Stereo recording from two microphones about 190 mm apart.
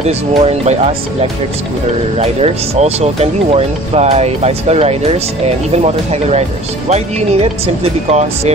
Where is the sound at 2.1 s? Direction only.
35° right (ahead or behind).